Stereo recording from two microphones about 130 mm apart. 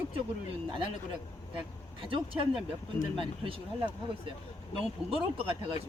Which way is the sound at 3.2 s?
45° right (ahead or behind).